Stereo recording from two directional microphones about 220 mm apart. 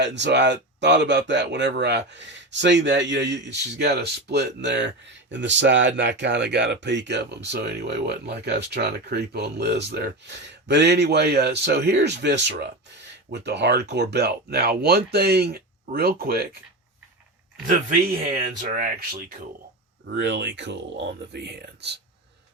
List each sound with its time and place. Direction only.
0.0 s speech: 55° right (ahead or behind)
17.7 s speech: 30° right (ahead or behind); by 21.9 s 50° right (ahead or behind)